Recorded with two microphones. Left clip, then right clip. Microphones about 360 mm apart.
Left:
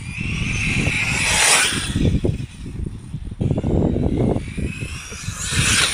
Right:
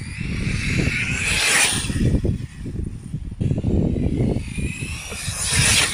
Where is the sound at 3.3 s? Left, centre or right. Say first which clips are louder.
Left 3 dB; left.